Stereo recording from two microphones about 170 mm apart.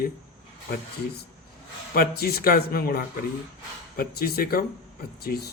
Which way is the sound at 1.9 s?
65° left (ahead or behind).